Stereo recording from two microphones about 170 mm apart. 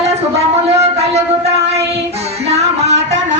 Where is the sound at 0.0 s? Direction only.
40° right (ahead or behind).